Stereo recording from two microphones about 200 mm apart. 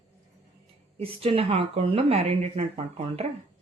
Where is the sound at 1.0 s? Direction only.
30° right (ahead or behind).